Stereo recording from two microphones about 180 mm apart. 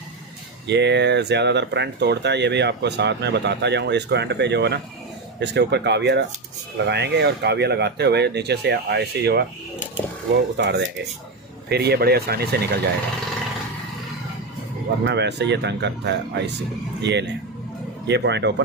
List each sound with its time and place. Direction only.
0.7 s speech: 70° right (ahead or behind)
10.6 s speech: 70° right (ahead or behind)
15.0 s speech: 70° right (ahead or behind)